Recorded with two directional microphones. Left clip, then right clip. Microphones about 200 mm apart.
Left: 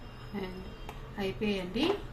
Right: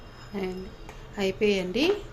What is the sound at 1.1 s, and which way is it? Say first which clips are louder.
Speech: right 9 dB; 35° right (ahead or behind).